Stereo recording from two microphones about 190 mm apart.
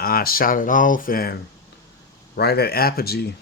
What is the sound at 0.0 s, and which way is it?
Speech, 50° left (ahead or behind).